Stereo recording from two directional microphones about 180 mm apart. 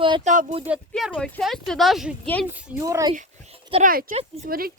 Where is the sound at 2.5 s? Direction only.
15° right (ahead or behind).